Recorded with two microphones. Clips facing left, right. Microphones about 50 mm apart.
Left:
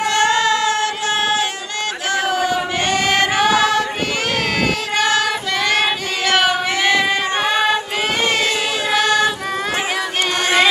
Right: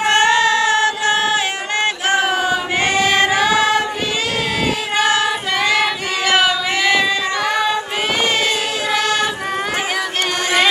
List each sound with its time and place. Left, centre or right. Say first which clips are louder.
0.0 s female singing: right 2 dB; right
1.0 s a sound: right 2 dB; right
2.9 s choir: right 2 dB; left
4.9 s child singing: right 2 dB; right
6.4 s female singing: even; left